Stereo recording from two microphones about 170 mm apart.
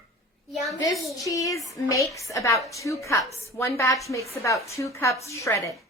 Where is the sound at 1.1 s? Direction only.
20° left (ahead or behind).